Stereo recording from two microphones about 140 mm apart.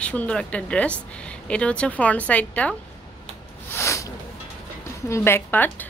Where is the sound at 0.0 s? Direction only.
10° left (ahead or behind).